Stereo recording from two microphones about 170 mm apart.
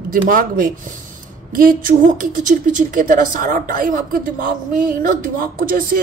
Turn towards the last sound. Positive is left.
turn(degrees=-60)  # may be behind; listen again after turning